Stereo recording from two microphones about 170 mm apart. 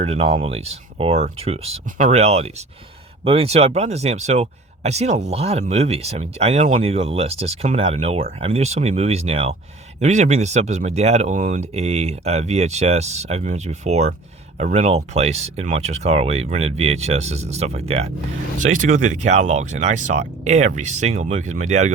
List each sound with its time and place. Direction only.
0.0 s speech: 40° right (ahead or behind)
18.6 s speech: 50° right (ahead or behind)